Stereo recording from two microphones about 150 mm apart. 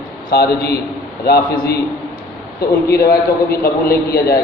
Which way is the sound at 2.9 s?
90° left.